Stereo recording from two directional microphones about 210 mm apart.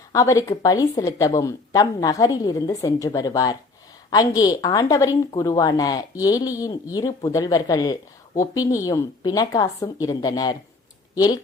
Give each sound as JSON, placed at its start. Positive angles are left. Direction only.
{"t": 0.1, "sound": "a woman's voice", "side_deg": 15}